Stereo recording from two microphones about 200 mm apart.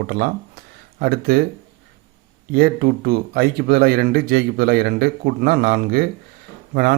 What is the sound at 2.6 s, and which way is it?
Speech, 50° right (ahead or behind).